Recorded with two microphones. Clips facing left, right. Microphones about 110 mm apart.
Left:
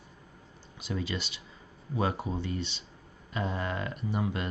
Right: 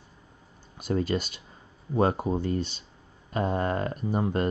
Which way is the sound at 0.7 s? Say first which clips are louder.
Right 8 dB; 45° right (ahead or behind).